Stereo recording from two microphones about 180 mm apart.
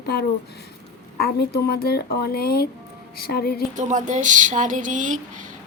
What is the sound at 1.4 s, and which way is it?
Speech, 60° left (ahead or behind).